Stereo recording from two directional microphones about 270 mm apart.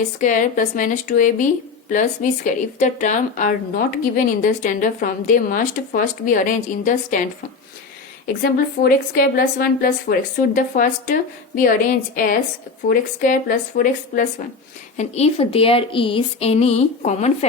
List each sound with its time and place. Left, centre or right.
0.2 s speech: left
8.4 s a woman's voice: left